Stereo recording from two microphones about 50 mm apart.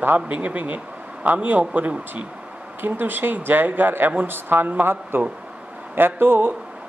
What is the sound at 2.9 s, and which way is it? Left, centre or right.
Speech, right.